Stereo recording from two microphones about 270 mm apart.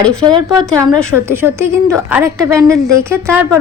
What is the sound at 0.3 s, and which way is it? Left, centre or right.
A woman's voice, centre.